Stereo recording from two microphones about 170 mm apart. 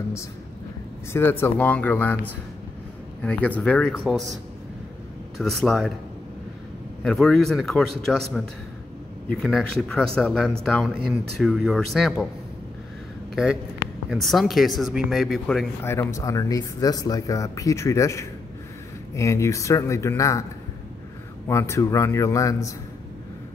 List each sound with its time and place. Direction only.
1.1 s a man's voice: 15° left (ahead or behind)
5.4 s speech: centre (ahead or behind)
7.0 s speech: centre (ahead or behind)
13.3 s speech: 5° right (ahead or behind)
15.8 s a man's voice: 15° left (ahead or behind)
21.5 s a man's voice: 15° left (ahead or behind)